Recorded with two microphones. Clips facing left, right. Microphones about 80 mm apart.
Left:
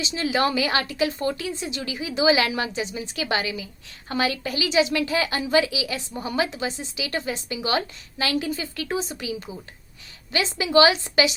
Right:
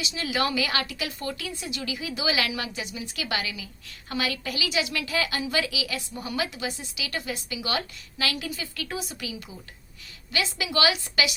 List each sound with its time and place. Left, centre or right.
0.0 s a woman's voice: left
10.3 s a woman's voice: left